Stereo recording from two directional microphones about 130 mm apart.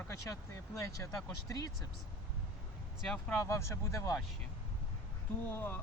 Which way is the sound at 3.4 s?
20° left (ahead or behind).